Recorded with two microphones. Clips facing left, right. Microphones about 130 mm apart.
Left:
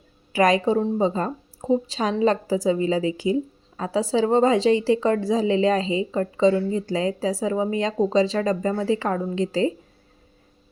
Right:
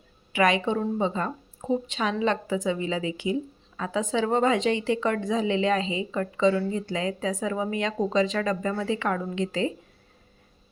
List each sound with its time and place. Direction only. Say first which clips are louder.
0.3 s a woman's voice: left 4 dB; 40° left (ahead or behind)